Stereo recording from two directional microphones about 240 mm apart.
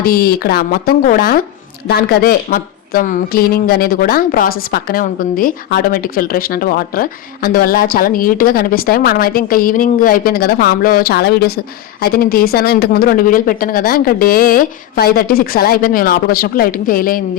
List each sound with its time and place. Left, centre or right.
0.0 s a woman's voice: left